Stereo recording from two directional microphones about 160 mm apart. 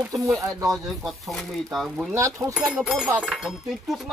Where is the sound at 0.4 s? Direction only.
20° right (ahead or behind).